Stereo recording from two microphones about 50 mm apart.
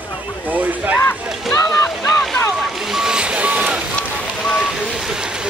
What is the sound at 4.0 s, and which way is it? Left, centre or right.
Fire, left.